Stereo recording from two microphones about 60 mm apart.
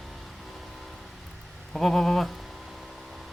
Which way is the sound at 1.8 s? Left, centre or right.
Centre.